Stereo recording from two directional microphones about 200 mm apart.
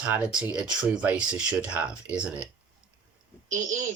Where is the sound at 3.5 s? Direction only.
40° right (ahead or behind).